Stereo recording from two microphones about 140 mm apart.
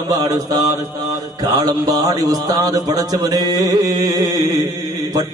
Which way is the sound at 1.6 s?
25° right (ahead or behind).